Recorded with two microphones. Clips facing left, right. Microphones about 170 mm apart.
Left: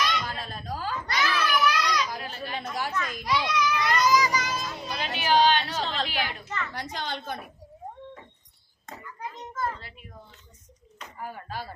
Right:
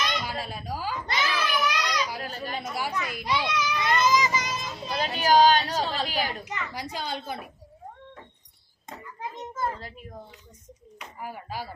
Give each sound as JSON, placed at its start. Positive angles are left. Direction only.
{"t": 0.0, "sound": "a sound", "side_deg": -10}
{"t": 1.0, "sound": "child singing", "side_deg": -25}
{"t": 2.1, "sound": "children playing", "side_deg": -40}
{"t": 2.6, "sound": "a sound", "side_deg": -10}
{"t": 3.8, "sound": "child singing", "side_deg": -20}
{"t": 4.9, "sound": "a sound", "side_deg": -40}
{"t": 6.4, "sound": "a woman's voice", "side_deg": -15}
{"t": 8.9, "sound": "children playing", "side_deg": -25}
{"t": 10.9, "sound": "speech", "side_deg": -10}